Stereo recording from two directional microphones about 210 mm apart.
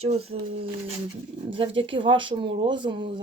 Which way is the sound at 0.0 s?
30° right (ahead or behind).